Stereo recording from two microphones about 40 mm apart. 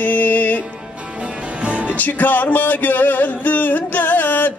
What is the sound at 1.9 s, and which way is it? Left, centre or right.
Music, left.